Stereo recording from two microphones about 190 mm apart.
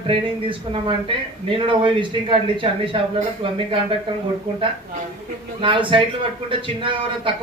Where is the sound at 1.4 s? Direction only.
25° right (ahead or behind).